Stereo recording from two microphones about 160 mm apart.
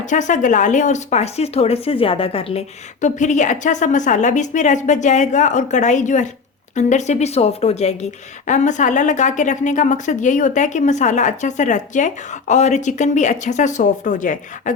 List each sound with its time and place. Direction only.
0.0 s speech: 50° left (ahead or behind)